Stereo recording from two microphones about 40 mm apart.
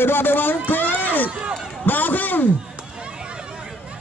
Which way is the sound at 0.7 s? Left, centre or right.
Left.